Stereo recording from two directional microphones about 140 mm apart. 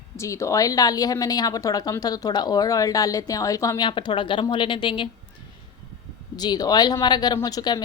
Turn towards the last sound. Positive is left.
turn(degrees=30)  # may be behind; listen again after turning